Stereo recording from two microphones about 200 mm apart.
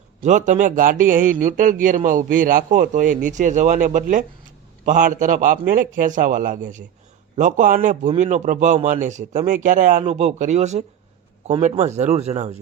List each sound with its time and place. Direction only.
0.2 s a man's voice: 40° right (ahead or behind)